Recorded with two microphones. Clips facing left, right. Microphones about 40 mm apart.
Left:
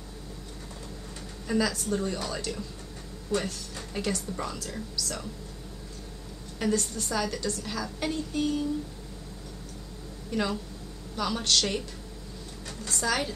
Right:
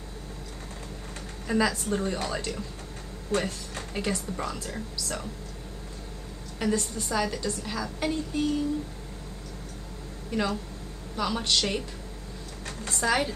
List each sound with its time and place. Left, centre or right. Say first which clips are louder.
1.5 s speech: right 2 dB; right
3.3 s speech: right 2 dB; right
3.9 s speech: right 1 dB; centre
6.8 s a woman's voice: right 2 dB; centre
10.3 s a woman's voice: right 1 dB; centre
12.9 s speech: right 3 dB; centre